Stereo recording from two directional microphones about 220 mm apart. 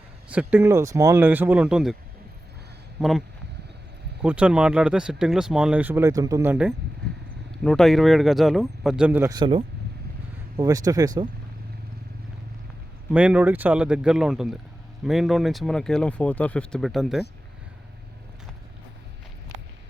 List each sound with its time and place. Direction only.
0.3 s speech: 5° right (ahead or behind)
3.0 s speech: centre (ahead or behind); by 11.1 s 15° right (ahead or behind)
13.1 s speech: 5° right (ahead or behind)